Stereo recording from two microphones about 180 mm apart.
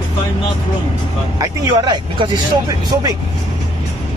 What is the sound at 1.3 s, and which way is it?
Speech, 20° right (ahead or behind).